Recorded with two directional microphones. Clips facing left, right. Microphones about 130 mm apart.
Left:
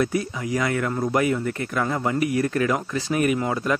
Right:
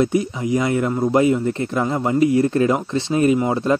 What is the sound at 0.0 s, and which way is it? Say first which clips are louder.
A man's voice: right 5 dB; 20° right (ahead or behind).